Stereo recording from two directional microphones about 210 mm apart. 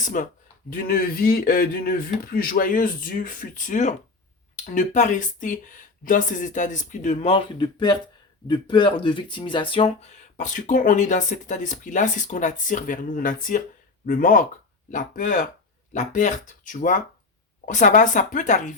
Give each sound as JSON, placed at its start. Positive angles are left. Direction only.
{"t": 0.0, "sound": "speech", "side_deg": 40}
{"t": 10.3, "sound": "speech", "side_deg": 35}